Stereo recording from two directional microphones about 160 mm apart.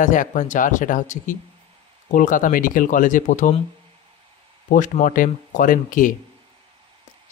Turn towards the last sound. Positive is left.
turn(degrees=55)  # may be behind; listen again after turning